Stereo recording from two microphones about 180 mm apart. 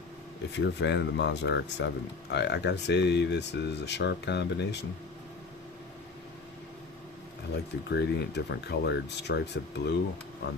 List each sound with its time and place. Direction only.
0.5 s speech: 75° left (ahead or behind)
7.5 s speech: 70° left (ahead or behind)